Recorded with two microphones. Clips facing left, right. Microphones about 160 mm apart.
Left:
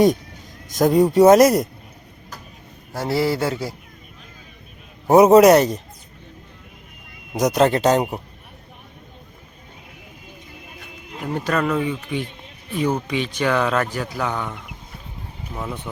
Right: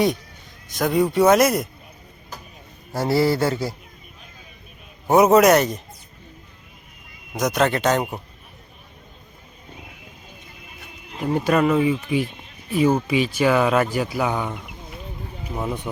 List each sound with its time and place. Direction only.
0.7 s speech: 40° left (ahead or behind)
2.9 s speech: centre (ahead or behind)
5.0 s speech: 35° left (ahead or behind)
7.3 s speech: 35° left (ahead or behind)
11.2 s speech: 10° right (ahead or behind)